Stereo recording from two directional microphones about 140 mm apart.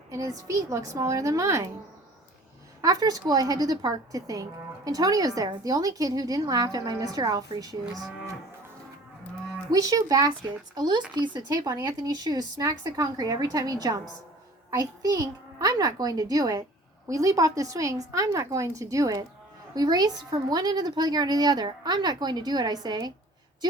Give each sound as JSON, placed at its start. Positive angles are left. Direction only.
{"t": 0.1, "sound": "a woman's voice", "side_deg": -25}
{"t": 2.8, "sound": "a woman's voice", "side_deg": -25}
{"t": 9.6, "sound": "a woman's voice", "side_deg": -25}